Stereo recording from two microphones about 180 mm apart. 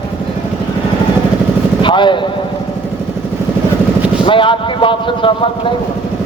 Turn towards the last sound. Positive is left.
turn(degrees=30)  # may be behind; listen again after turning